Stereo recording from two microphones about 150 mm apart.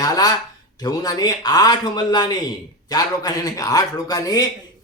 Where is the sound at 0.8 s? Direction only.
25° left (ahead or behind).